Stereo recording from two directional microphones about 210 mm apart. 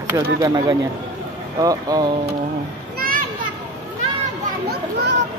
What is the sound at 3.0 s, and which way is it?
Children playing, 45° right (ahead or behind).